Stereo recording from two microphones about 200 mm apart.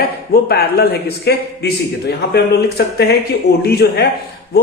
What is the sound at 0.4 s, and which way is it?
A man's voice, 50° left (ahead or behind).